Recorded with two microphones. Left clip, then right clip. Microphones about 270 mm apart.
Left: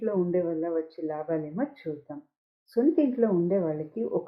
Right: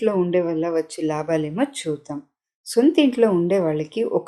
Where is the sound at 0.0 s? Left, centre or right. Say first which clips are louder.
Right 7 dB; right.